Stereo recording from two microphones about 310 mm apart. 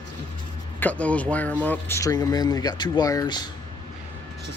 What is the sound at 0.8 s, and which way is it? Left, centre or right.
Speech, centre.